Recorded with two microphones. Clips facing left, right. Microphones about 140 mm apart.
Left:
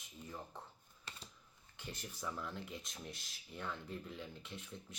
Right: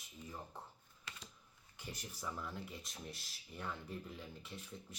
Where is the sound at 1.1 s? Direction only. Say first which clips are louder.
Even; 30° left (ahead or behind).